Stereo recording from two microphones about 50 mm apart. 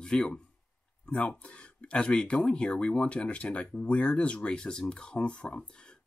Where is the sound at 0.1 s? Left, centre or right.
Centre.